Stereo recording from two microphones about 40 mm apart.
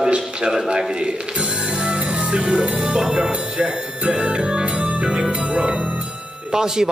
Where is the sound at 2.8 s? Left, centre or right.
Centre.